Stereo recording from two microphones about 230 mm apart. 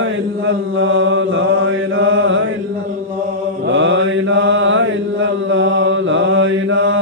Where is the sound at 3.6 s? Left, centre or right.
Right.